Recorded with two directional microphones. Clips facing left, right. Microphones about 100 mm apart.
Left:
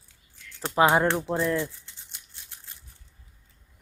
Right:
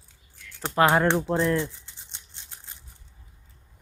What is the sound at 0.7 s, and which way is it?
Speech, 15° left (ahead or behind).